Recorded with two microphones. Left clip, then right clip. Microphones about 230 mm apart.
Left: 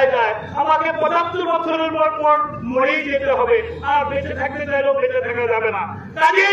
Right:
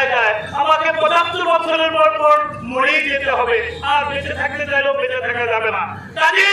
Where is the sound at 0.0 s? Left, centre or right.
Right.